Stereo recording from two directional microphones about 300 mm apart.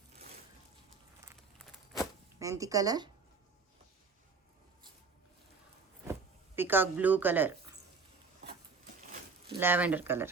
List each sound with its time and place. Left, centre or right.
2.4 s speech: centre
6.6 s speech: centre
9.6 s speech: centre